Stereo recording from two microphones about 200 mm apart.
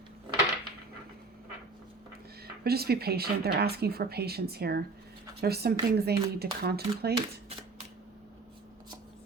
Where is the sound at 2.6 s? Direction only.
50° right (ahead or behind).